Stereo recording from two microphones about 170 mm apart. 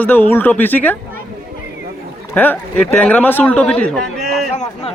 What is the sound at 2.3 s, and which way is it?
A man's voice, 10° left (ahead or behind).